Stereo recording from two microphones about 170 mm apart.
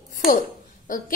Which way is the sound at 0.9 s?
50° left (ahead or behind).